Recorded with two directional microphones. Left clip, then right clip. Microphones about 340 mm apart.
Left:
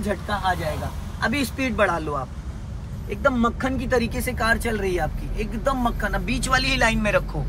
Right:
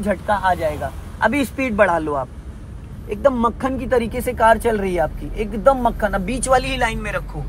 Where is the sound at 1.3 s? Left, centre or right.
Centre.